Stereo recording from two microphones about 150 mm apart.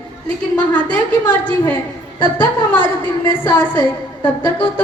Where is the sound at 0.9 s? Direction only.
10° left (ahead or behind).